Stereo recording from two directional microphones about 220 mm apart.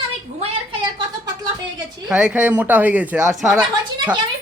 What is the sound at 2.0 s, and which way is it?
Speech, 5° right (ahead or behind).